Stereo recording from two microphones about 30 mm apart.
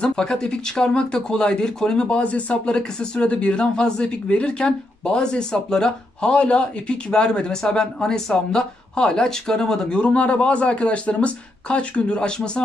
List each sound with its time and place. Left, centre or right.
0.2 s speech: left
2.0 s speech: left
2.7 s speech: left
9.9 s speech: left